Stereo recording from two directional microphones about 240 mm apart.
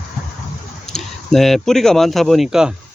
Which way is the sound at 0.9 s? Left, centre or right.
Centre.